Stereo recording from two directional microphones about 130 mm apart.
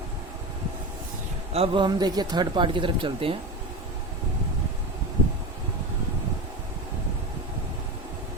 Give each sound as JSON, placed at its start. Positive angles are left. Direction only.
{"t": 1.5, "sound": "speech", "side_deg": -40}